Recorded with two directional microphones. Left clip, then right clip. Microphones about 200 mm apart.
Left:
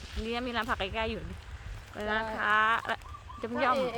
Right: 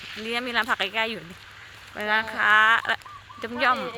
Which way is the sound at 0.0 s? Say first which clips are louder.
Right 6 dB; 15° left (ahead or behind).